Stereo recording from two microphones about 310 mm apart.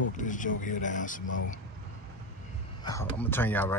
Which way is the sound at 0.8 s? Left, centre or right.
Left.